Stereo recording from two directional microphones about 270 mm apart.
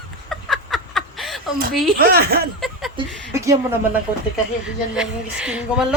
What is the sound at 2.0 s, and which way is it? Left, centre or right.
Speech, right.